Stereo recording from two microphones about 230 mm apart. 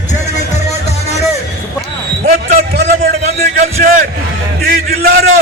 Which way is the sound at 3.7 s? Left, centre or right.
Right.